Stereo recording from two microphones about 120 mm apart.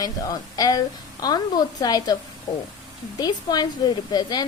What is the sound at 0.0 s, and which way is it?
A woman's voice, 30° left (ahead or behind).